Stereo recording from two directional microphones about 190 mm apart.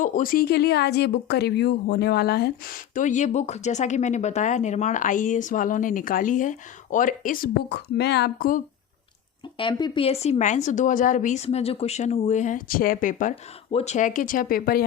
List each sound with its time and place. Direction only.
0.0 s speech: 45° left (ahead or behind)
9.6 s speech: 25° left (ahead or behind); by 13.3 s 45° left (ahead or behind)
13.7 s speech: 35° left (ahead or behind); by 14.8 s 50° left (ahead or behind)